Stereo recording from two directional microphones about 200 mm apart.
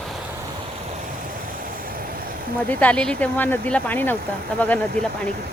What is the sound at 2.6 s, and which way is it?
Speech, 5° left (ahead or behind).